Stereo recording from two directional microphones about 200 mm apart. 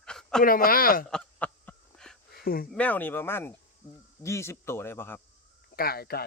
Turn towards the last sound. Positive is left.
turn(degrees=50)  # may be behind; listen again after turning